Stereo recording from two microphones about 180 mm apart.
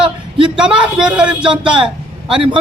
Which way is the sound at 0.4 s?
5° right (ahead or behind).